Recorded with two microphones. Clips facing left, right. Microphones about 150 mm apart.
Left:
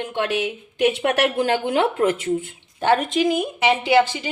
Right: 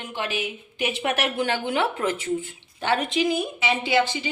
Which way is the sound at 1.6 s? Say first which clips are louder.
Left 5 dB; 50° left (ahead or behind).